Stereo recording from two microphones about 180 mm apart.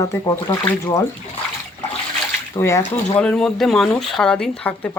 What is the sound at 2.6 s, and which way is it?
Speech, 15° left (ahead or behind).